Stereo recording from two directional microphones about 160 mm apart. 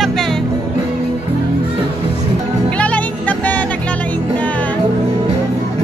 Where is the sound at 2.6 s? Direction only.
10° left (ahead or behind).